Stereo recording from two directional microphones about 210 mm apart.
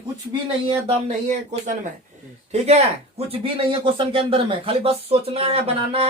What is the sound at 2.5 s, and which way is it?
Speech, 30° right (ahead or behind).